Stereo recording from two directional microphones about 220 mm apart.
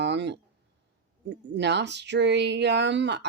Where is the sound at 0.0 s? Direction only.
50° right (ahead or behind).